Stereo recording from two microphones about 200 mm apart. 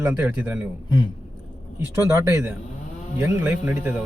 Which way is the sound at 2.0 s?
15° right (ahead or behind).